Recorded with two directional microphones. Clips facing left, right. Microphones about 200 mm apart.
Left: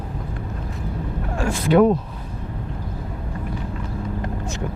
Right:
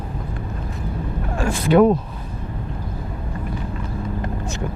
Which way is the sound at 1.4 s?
20° right (ahead or behind).